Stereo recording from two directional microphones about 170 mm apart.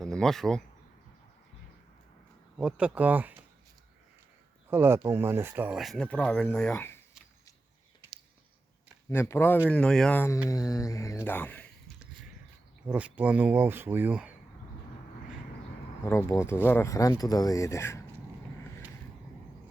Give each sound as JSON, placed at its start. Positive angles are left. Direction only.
{"t": 0.0, "sound": "speech", "side_deg": 5}
{"t": 2.6, "sound": "speech", "side_deg": -5}
{"t": 4.7, "sound": "speech", "side_deg": -15}
{"t": 9.0, "sound": "speech", "side_deg": 15}
{"t": 12.9, "sound": "speech", "side_deg": -10}
{"t": 16.0, "sound": "speech", "side_deg": 15}